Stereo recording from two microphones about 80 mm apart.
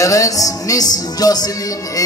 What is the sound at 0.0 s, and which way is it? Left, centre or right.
Music, left.